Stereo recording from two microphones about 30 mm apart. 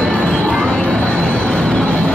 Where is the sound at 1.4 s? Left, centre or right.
Left.